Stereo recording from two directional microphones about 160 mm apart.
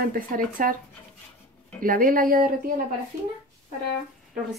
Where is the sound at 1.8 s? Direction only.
60° right (ahead or behind).